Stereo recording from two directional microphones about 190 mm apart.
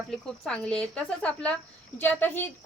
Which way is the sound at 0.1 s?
5° left (ahead or behind).